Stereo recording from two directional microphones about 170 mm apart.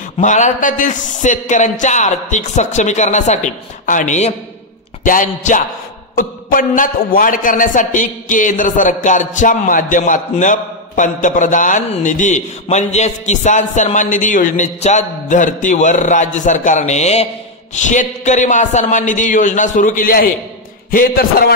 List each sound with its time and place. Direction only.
0.2 s a man's voice: 45° left (ahead or behind); by 21.5 s 60° left (ahead or behind)